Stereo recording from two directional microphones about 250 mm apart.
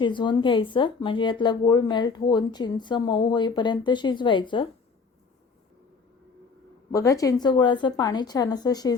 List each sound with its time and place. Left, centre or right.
0.0 s speech: centre
6.9 s speech: centre